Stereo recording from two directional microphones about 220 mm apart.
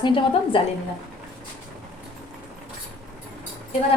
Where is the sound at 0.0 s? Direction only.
20° left (ahead or behind).